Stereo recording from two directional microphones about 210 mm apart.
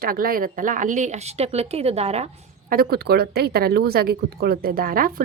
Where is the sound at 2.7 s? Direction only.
45° right (ahead or behind).